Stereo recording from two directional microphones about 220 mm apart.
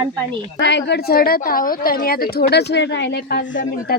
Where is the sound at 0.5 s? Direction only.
50° left (ahead or behind).